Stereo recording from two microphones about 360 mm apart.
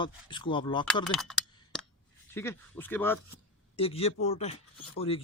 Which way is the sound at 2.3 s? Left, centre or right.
Centre.